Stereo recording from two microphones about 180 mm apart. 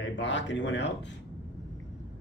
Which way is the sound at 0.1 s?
85° left.